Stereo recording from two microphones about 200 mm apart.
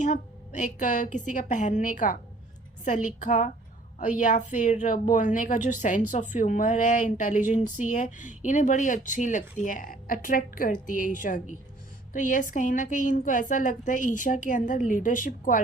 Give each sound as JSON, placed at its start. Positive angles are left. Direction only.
{"t": 0.0, "sound": "speech", "side_deg": 40}